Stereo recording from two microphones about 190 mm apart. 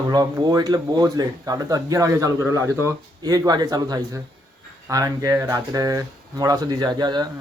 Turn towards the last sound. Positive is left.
turn(degrees=-20)  # may be behind; listen again after turning